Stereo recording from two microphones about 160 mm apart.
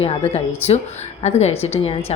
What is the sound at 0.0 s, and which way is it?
Speech, 40° left (ahead or behind).